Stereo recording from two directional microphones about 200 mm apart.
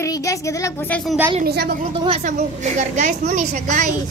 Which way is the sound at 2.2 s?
35° right (ahead or behind).